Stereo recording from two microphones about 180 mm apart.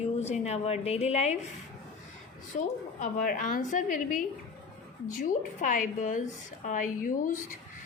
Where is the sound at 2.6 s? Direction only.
45° left (ahead or behind).